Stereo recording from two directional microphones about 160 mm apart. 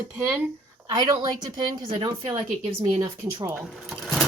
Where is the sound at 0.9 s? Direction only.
25° right (ahead or behind).